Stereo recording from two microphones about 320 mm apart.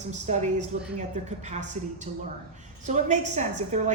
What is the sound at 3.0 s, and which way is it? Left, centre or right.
Speech, right.